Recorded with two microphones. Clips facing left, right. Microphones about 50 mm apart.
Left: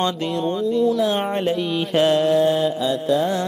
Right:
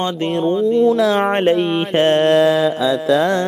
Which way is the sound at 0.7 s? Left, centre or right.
Right.